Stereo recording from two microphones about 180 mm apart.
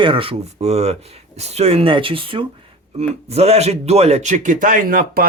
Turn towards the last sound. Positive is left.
turn(degrees=-50)  # may be behind; listen again after turning